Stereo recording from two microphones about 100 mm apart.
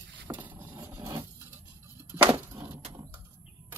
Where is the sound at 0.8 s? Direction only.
25° right (ahead or behind).